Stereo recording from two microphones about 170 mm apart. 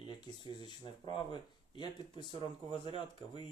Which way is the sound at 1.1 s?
30° left (ahead or behind).